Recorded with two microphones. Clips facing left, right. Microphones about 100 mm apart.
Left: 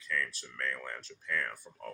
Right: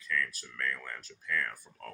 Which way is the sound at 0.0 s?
25° left (ahead or behind).